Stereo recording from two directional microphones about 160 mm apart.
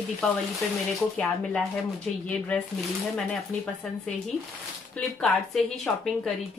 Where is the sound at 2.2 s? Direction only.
10° left (ahead or behind).